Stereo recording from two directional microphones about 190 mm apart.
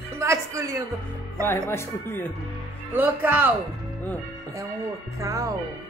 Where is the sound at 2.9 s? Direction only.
10° right (ahead or behind).